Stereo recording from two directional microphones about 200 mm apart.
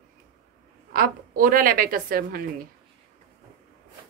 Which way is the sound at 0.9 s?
45° right (ahead or behind).